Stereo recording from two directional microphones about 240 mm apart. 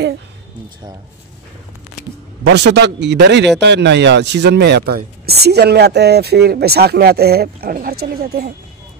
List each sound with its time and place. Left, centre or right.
2.5 s speech: right